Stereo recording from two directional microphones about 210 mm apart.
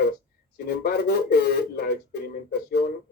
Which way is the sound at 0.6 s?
45° left (ahead or behind).